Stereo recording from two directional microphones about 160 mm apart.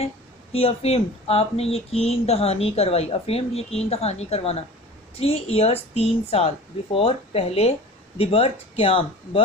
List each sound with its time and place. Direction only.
0.0 s speech: 40° left (ahead or behind)